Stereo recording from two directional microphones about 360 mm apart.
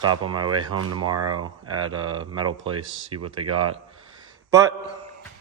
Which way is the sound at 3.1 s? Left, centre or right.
Right.